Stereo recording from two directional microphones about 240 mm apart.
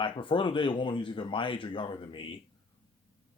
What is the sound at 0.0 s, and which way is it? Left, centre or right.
Speech, left.